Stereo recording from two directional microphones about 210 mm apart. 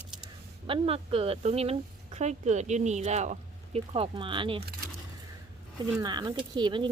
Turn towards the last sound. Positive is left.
turn(degrees=-20)  # may be behind; listen again after turning